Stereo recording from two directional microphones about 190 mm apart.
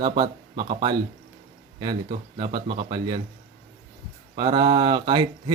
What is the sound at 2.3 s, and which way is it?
Speech, 25° right (ahead or behind).